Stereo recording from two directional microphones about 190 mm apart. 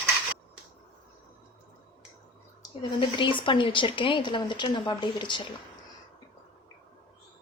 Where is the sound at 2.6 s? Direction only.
25° left (ahead or behind).